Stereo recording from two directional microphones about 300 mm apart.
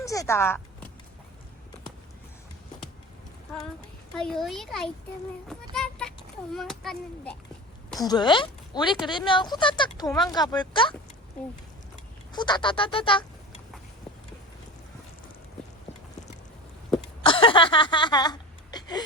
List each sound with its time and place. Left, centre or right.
0.0 s speech: centre
4.1 s a child's voice: centre
8.0 s speech: centre
10.1 s a child's voice: centre
10.3 s speech: centre
12.3 s speech: centre
17.2 s a sound: centre